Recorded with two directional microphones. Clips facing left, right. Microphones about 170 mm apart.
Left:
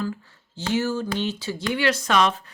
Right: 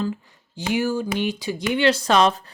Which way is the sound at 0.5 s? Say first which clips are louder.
Right 2 dB; 15° right (ahead or behind).